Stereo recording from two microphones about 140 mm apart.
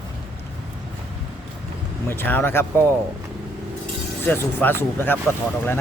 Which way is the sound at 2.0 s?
15° left (ahead or behind).